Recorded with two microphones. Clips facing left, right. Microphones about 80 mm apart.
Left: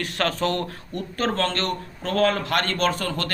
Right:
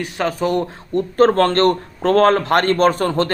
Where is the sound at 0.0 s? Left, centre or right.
Centre.